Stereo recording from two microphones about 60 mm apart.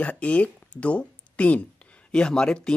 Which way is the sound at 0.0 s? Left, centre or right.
Left.